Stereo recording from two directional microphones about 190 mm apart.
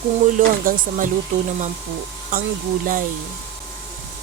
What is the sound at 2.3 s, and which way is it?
Speech, 50° right (ahead or behind).